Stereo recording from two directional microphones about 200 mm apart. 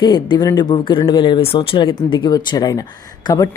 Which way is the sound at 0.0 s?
20° left (ahead or behind).